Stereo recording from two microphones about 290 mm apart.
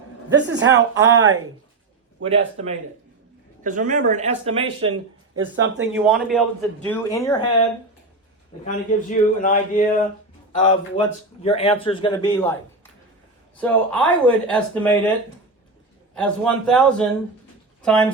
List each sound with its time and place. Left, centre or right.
0.3 s speech: right
3.6 s speech: right
4.4 s speech: right
5.9 s speech: centre
8.6 s a man's voice: left; by 12.5 s centre
13.6 s speech: centre
16.1 s speech: centre
17.8 s speech: centre